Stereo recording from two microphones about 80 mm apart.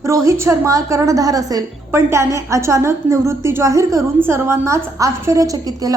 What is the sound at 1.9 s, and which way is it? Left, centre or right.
A woman's voice, right.